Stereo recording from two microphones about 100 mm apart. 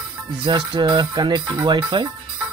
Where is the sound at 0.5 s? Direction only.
50° right (ahead or behind).